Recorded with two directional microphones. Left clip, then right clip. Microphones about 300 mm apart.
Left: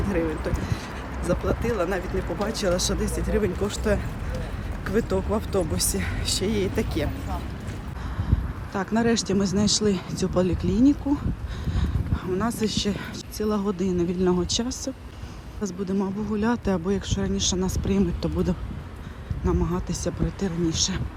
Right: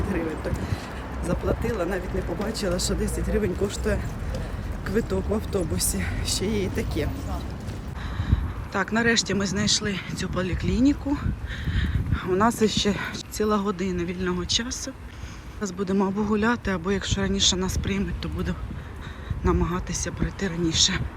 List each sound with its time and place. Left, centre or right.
0.1 s speech: centre
8.7 s speech: centre
11.7 s a sound: centre
12.2 s speech: centre